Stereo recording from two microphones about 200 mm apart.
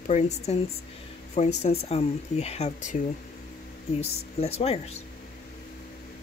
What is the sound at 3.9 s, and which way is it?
Speech, 30° left (ahead or behind).